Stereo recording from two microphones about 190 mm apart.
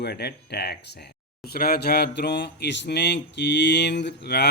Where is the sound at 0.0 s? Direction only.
60° left (ahead or behind).